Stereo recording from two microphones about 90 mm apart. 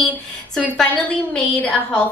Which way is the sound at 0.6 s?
10° left (ahead or behind).